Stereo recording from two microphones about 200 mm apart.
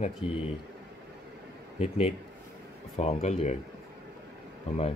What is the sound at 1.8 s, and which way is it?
A man's voice, 30° left (ahead or behind).